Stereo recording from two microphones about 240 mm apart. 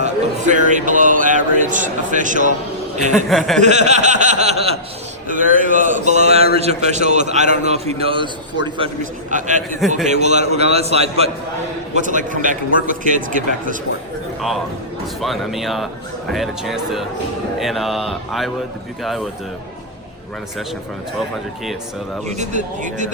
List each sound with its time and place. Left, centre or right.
0.0 s speech: right
3.2 s mantra: centre
3.6 s a man's voice: right
9.3 s a man's voice: right
15.2 s mantra: centre
22.4 s speech: right